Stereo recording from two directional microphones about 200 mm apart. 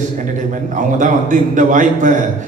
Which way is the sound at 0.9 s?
40° right (ahead or behind).